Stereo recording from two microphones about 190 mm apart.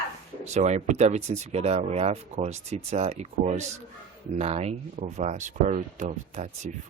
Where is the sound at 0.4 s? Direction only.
35° right (ahead or behind).